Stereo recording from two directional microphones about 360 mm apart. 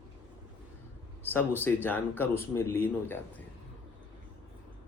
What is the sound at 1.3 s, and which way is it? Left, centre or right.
Speech, centre.